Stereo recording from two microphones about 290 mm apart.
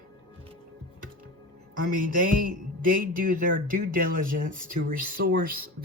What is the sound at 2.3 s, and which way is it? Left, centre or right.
Speech, right.